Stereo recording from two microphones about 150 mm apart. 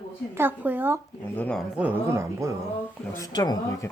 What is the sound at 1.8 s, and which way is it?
Speech, 10° right (ahead or behind).